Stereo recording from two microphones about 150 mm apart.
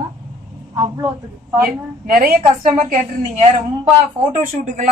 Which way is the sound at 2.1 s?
75° right (ahead or behind).